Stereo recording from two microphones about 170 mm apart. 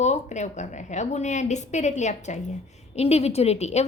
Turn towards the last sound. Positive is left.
turn(degrees=40)  # may be behind; listen again after turning